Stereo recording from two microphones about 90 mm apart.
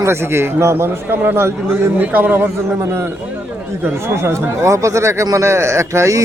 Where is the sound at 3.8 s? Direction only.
25° right (ahead or behind).